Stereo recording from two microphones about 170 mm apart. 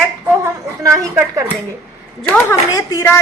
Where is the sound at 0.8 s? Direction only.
15° right (ahead or behind).